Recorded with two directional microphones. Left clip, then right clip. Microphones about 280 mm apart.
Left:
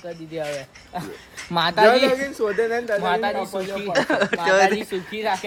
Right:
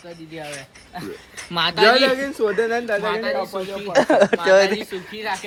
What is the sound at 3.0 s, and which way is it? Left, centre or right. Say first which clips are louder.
Speech: left 1 dB; left.